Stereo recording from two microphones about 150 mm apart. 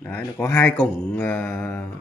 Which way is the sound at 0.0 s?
10° left (ahead or behind).